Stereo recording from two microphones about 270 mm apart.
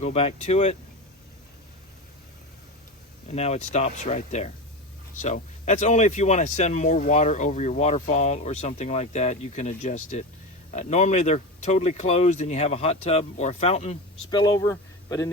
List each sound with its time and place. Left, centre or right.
0.0 s speech: left
3.2 s speech: left